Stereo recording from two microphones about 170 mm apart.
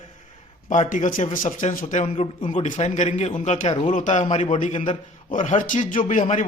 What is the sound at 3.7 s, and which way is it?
Speech, 35° left (ahead or behind).